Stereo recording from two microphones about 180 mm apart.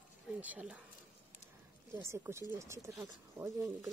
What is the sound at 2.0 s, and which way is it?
Speech, 15° right (ahead or behind).